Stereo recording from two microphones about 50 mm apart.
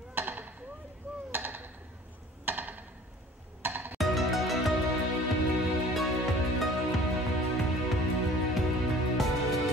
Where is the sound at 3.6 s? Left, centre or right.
Right.